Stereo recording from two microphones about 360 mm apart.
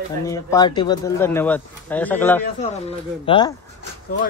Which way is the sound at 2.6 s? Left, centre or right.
Centre.